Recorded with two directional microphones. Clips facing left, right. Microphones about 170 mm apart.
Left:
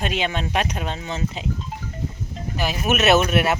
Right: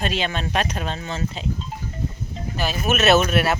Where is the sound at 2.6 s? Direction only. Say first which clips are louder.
Even; 15° left (ahead or behind).